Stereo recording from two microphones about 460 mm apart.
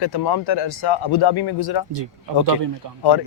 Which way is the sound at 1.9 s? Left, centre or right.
Right.